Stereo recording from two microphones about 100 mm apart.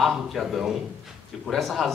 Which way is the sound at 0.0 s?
Centre (ahead or behind).